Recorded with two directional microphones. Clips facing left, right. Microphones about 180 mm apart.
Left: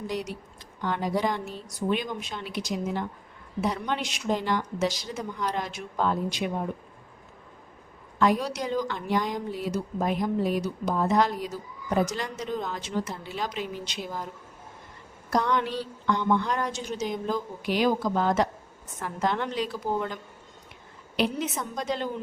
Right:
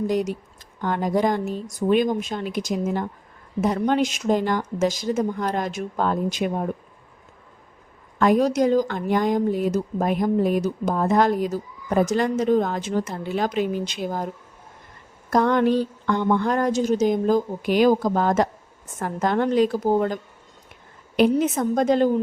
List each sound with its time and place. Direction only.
0.1 s speech: 50° right (ahead or behind)
8.2 s speech: 45° right (ahead or behind)
15.3 s speech: 50° right (ahead or behind)
21.2 s speech: 50° right (ahead or behind)